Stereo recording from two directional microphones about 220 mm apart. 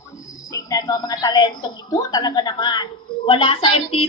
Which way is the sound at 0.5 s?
15° left (ahead or behind).